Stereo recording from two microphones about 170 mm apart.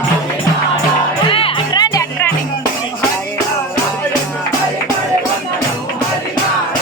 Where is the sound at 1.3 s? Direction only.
30° left (ahead or behind).